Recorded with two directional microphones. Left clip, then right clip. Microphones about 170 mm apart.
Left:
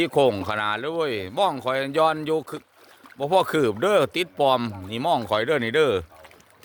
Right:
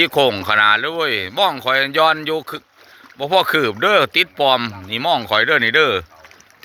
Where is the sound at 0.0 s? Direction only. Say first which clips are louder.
Right 5 dB; 10° left (ahead or behind).